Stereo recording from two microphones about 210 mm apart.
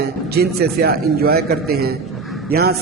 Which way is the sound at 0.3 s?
50° right (ahead or behind).